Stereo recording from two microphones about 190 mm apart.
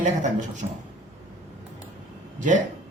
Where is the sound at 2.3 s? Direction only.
40° right (ahead or behind).